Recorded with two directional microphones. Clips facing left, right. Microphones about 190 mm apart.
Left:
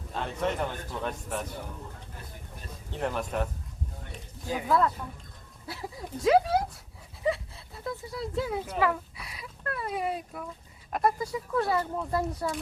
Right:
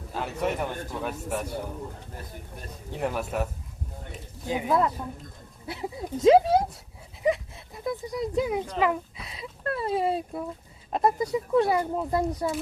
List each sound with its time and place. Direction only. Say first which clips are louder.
0.1 s a man's voice: right 2 dB; 5° right (ahead or behind)
2.9 s a man's voice: right 2 dB; 5° right (ahead or behind)
4.4 s a man's voice: right 2 dB; 20° right (ahead or behind)
7.3 s a sound: right 4 dB; 15° right (ahead or behind)
10.9 s speech: right 4 dB; 20° right (ahead or behind)